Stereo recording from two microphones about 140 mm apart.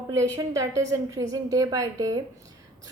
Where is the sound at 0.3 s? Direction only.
25° right (ahead or behind).